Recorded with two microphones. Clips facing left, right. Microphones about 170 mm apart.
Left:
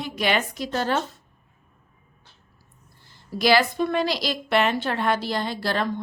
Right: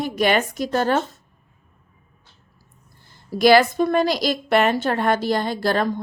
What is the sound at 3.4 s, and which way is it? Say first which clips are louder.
A woman's voice: right 5 dB; 50° right (ahead or behind).